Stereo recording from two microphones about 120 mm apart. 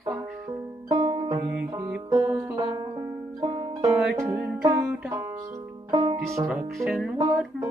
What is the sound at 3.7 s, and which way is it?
Music, 25° right (ahead or behind).